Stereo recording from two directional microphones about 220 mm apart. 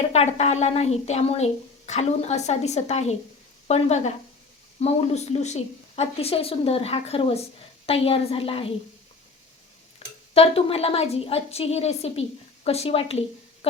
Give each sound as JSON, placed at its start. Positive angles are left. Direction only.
{"t": 0.1, "sound": "a woman's voice", "side_deg": 30}
{"t": 10.0, "sound": "a sound", "side_deg": 25}
{"t": 10.3, "sound": "a woman's voice", "side_deg": 25}